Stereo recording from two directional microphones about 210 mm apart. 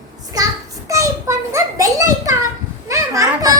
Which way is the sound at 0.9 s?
15° right (ahead or behind).